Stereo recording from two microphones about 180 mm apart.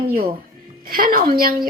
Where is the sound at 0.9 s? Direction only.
55° right (ahead or behind).